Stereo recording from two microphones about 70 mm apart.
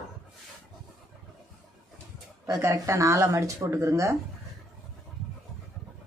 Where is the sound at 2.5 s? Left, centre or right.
Right.